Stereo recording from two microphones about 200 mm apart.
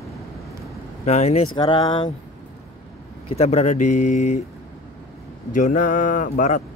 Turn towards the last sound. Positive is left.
turn(degrees=40)  # may be behind; listen again after turning